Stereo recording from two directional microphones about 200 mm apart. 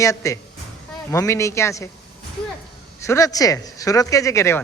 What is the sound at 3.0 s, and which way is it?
Speech, 15° left (ahead or behind).